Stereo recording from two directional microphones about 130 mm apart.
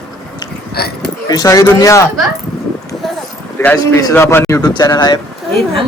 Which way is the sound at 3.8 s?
25° left (ahead or behind).